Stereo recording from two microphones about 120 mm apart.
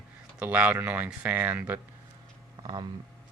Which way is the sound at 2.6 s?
40° right (ahead or behind).